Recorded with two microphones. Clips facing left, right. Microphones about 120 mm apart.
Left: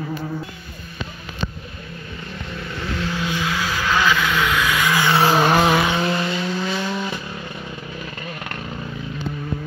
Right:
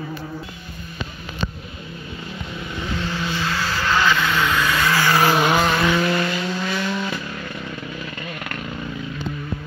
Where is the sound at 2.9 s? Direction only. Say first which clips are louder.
Left 2 dB; centre (ahead or behind).